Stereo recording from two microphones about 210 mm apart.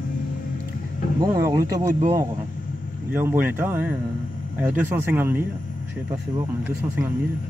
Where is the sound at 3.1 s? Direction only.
10° right (ahead or behind).